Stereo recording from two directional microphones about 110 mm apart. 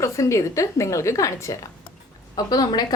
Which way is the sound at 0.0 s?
30° left (ahead or behind).